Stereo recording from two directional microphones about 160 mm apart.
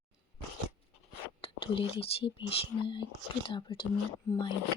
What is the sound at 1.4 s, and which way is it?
Speech, 35° left (ahead or behind).